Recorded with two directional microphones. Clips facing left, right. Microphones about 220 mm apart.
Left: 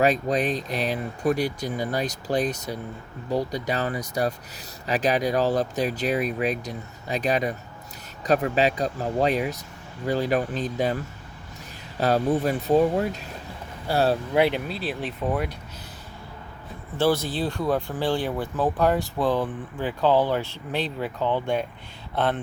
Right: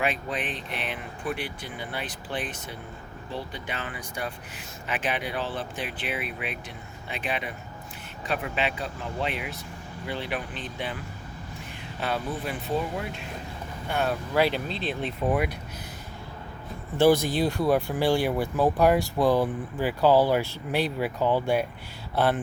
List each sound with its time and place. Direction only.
0.0 s speech: 40° left (ahead or behind)
14.3 s speech: 20° left (ahead or behind)
14.7 s speech: 5° left (ahead or behind)
17.0 s speech: 15° right (ahead or behind)